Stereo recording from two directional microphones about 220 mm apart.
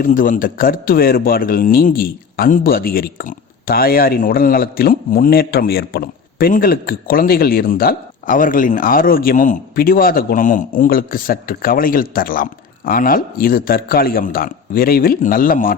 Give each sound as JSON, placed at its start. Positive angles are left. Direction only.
{"t": 0.0, "sound": "speech", "side_deg": 40}